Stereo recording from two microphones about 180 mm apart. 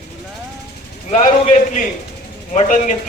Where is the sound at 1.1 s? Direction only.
45° left (ahead or behind).